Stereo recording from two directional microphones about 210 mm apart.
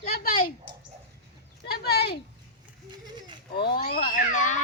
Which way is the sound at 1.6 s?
50° left (ahead or behind).